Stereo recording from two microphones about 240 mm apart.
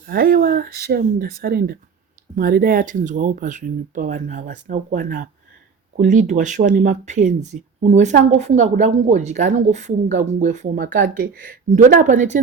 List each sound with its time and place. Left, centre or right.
0.1 s speech: right